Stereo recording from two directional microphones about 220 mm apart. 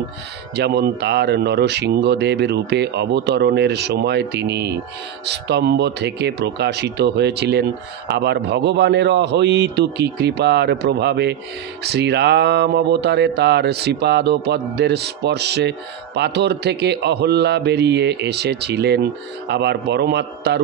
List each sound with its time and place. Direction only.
0.6 s speech: 50° right (ahead or behind)